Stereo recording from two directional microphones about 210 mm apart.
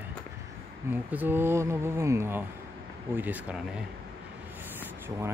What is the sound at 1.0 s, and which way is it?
Speech, 10° right (ahead or behind).